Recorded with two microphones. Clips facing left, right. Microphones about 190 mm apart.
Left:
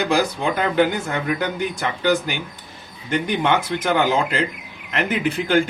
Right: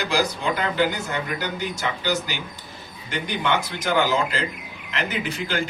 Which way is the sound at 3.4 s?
55° left (ahead or behind).